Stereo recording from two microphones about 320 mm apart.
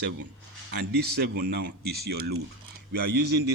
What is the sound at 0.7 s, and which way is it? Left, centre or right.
Speech, right.